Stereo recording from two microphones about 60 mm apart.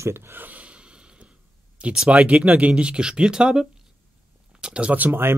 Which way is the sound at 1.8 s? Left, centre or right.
Centre.